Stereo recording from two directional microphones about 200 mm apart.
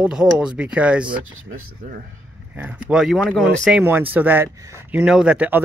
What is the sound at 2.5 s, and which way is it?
Speech, 10° right (ahead or behind).